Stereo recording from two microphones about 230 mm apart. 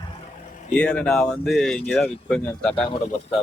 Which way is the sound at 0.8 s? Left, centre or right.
Centre.